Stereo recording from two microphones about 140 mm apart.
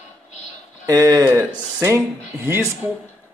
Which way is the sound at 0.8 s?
25° right (ahead or behind).